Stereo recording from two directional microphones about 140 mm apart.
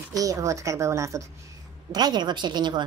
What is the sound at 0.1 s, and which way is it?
A woman's voice, 25° right (ahead or behind).